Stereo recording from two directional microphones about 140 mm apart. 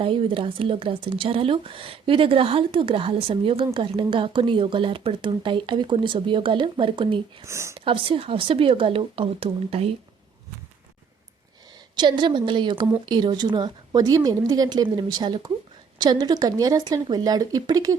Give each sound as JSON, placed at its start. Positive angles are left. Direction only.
{"t": 0.0, "sound": "speech", "side_deg": -40}
{"t": 7.4, "sound": "a woman's voice", "side_deg": -20}
{"t": 7.9, "sound": "speech", "side_deg": -40}
{"t": 11.9, "sound": "a woman's voice", "side_deg": -35}